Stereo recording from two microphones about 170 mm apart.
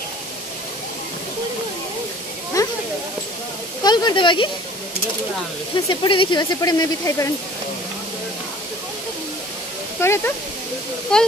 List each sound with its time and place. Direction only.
2.6 s a sound: 20° left (ahead or behind)
3.8 s speech: 25° left (ahead or behind)
5.9 s speech: 30° left (ahead or behind)
9.9 s speech: 15° left (ahead or behind)
11.1 s speech: 5° left (ahead or behind)